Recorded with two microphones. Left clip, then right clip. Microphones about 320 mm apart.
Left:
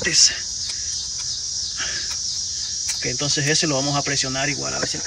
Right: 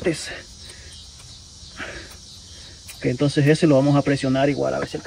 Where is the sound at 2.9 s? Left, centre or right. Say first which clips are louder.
Right 4 dB; right.